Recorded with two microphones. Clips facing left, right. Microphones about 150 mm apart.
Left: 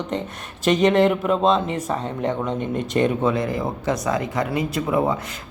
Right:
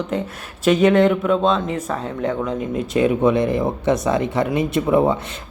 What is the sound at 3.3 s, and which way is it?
Speech, 25° right (ahead or behind).